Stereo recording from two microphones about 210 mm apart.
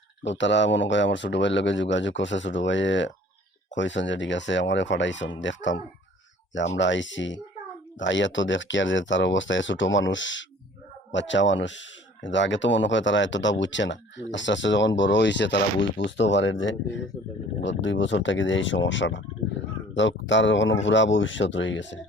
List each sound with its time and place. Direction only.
0.2 s speech: 60° left (ahead or behind)
6.7 s speech: 60° left (ahead or behind)